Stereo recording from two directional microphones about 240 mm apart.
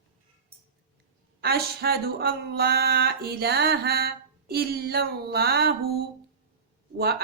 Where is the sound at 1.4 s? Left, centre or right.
Right.